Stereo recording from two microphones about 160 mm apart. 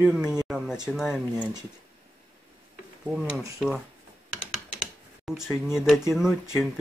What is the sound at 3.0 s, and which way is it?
Speech, 5° right (ahead or behind).